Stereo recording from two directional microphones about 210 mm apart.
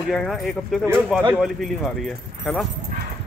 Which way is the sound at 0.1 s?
Centre (ahead or behind).